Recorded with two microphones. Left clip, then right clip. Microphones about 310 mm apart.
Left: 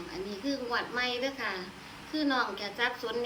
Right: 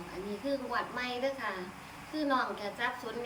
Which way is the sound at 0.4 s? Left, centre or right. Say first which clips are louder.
Left 1 dB; centre.